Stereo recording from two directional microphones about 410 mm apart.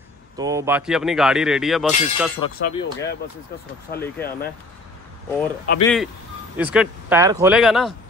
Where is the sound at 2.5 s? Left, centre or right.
Left.